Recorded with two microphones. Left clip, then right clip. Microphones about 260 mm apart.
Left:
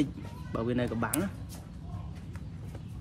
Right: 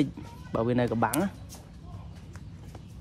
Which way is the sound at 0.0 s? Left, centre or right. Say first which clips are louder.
Right 2 dB; right.